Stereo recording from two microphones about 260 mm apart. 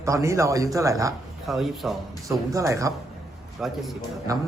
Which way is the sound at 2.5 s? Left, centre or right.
Centre.